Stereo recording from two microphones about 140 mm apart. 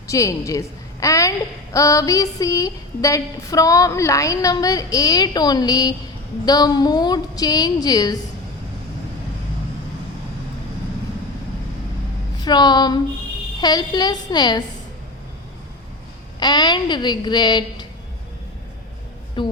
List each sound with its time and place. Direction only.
0.1 s a woman's voice: 25° left (ahead or behind)
1.7 s a sound: 25° left (ahead or behind)
12.4 s a woman's voice: 30° left (ahead or behind)
13.6 s a sound: 30° left (ahead or behind)
16.4 s a woman's voice: 30° left (ahead or behind)
19.4 s a woman's voice: 35° left (ahead or behind)